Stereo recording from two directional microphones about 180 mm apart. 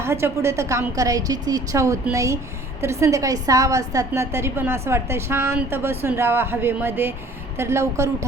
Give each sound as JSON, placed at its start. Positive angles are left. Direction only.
{"t": 0.0, "sound": "a woman's voice", "side_deg": -15}